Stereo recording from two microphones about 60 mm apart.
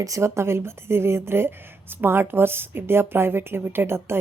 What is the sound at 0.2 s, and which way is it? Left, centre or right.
Speech, right.